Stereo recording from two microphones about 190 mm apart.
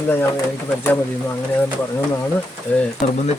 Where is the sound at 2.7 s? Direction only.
10° left (ahead or behind).